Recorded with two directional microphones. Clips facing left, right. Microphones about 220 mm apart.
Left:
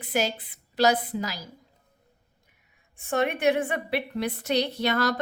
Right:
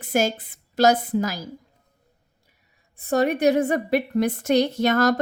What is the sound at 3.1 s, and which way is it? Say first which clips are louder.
A woman's voice: right 5 dB; 40° right (ahead or behind).